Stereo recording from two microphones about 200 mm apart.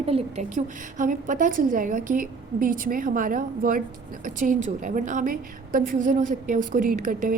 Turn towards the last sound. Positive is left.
turn(degrees=-40)  # may be behind; listen again after turning